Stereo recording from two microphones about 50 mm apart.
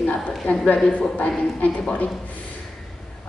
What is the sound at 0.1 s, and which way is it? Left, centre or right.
A woman's voice, left.